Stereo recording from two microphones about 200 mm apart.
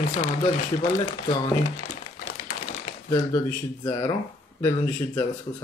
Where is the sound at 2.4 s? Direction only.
30° left (ahead or behind).